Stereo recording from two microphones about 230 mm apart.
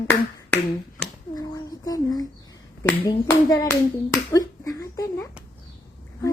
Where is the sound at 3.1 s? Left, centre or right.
Centre.